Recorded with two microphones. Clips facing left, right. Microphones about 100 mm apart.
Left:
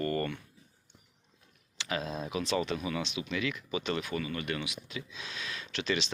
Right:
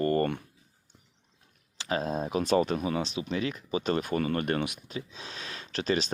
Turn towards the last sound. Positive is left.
turn(degrees=-40)  # may be behind; listen again after turning